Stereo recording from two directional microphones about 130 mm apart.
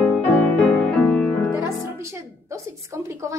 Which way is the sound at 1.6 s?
20° right (ahead or behind).